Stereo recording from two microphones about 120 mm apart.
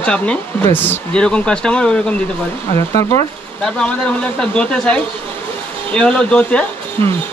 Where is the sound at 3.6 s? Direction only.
10° left (ahead or behind).